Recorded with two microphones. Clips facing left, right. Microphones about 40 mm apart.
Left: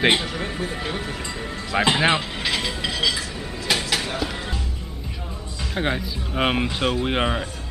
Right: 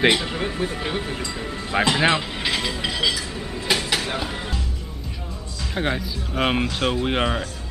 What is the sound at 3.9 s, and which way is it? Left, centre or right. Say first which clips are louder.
Music: even; centre.